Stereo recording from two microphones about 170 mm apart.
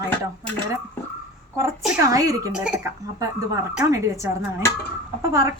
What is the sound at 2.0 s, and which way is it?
Speech, 20° right (ahead or behind).